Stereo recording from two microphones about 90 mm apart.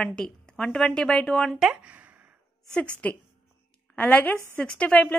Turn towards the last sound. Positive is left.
turn(degrees=15)  # may be behind; listen again after turning